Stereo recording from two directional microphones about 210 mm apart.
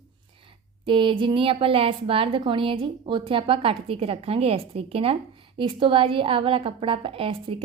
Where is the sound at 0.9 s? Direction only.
25° right (ahead or behind).